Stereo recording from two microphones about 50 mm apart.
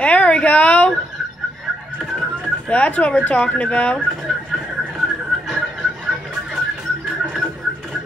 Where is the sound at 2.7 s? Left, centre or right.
Left.